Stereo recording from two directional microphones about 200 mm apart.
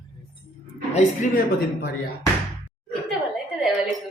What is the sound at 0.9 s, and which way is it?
Speech, 40° left (ahead or behind).